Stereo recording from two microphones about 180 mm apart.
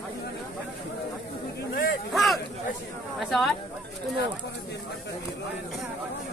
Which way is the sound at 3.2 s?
Centre (ahead or behind).